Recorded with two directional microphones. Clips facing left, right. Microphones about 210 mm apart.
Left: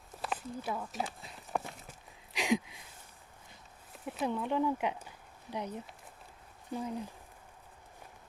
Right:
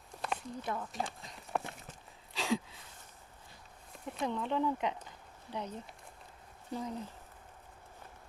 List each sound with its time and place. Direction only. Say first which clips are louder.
0.1 s walk: even; 5° left (ahead or behind)
2.3 s a sound: left 3 dB; 15° left (ahead or behind)
3.9 s speech: left 2 dB; 5° left (ahead or behind)